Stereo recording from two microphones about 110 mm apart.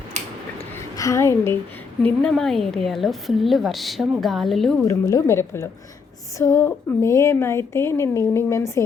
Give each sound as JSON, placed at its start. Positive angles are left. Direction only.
{"t": 0.9, "sound": "a woman's voice", "side_deg": 30}
{"t": 2.0, "sound": "a woman's voice", "side_deg": 10}
{"t": 4.8, "sound": "speech", "side_deg": 30}